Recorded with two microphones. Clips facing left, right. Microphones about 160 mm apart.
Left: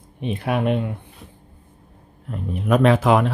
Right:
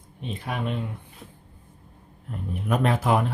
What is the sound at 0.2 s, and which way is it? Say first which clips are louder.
Speech: left 8 dB; 70° left (ahead or behind).